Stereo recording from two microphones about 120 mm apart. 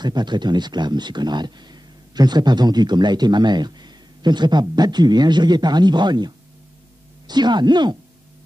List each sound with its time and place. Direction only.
0.0 s speech: 35° right (ahead or behind)